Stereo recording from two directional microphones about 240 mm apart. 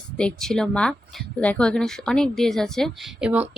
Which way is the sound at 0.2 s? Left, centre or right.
Centre.